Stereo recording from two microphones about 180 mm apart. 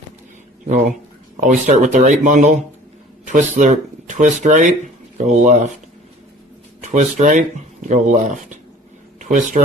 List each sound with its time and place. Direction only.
1.4 s speech: 45° right (ahead or behind)
6.8 s speech: 40° right (ahead or behind)